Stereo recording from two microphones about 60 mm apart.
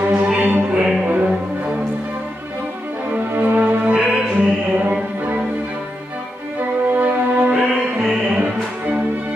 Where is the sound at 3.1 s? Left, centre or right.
Right.